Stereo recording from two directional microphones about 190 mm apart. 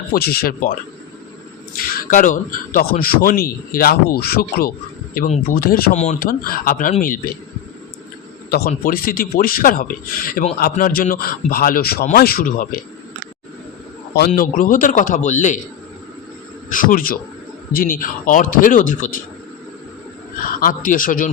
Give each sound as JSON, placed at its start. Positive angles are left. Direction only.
{"t": 0.1, "sound": "a man's voice", "side_deg": 55}
{"t": 2.0, "sound": "a man's voice", "side_deg": 45}
{"t": 5.9, "sound": "a man's voice", "side_deg": 35}
{"t": 8.4, "sound": "a man's voice", "side_deg": 55}
{"t": 14.2, "sound": "a man's voice", "side_deg": 45}
{"t": 16.6, "sound": "a man's voice", "side_deg": 45}
{"t": 20.6, "sound": "a man's voice", "side_deg": 45}